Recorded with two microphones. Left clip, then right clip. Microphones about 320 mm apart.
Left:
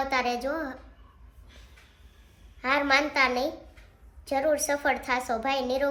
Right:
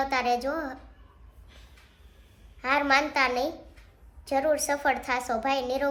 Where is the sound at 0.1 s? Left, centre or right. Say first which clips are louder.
Right 1 dB; centre.